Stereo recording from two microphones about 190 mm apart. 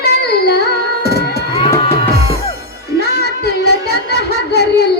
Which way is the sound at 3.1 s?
60° left (ahead or behind).